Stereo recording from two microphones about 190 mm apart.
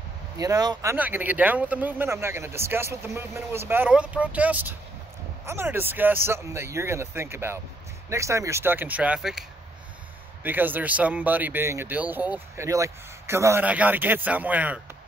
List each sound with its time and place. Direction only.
0.4 s speech: 20° right (ahead or behind)
0.9 s speech: 10° right (ahead or behind)
10.4 s speech: 10° right (ahead or behind)